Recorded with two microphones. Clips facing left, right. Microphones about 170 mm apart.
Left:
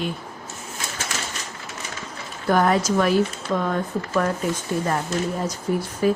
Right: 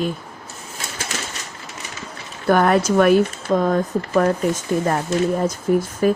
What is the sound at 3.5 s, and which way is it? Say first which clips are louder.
Speech: right 6 dB; 40° right (ahead or behind).